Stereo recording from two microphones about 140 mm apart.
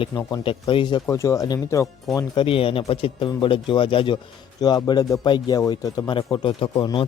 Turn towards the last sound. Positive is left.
turn(degrees=35)  # may be behind; listen again after turning